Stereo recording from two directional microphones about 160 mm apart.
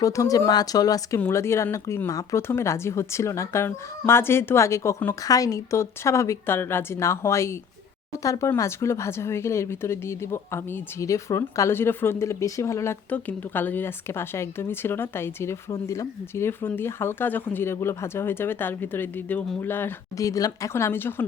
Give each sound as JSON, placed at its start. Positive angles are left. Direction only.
{"t": 0.0, "sound": "speech", "side_deg": 20}